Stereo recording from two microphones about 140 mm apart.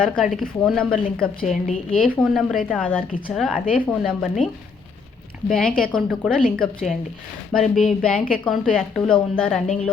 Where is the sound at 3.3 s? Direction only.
Centre (ahead or behind).